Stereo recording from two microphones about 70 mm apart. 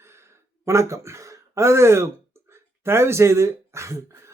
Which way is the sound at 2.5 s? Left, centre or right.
Right.